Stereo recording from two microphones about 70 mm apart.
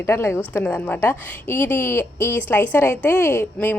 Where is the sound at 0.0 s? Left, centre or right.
Left.